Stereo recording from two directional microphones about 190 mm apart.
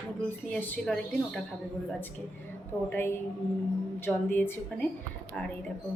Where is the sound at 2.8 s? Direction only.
10° left (ahead or behind).